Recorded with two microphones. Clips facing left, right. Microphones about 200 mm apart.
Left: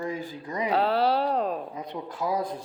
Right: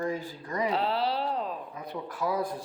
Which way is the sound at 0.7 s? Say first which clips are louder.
Left 8 dB; 55° left (ahead or behind).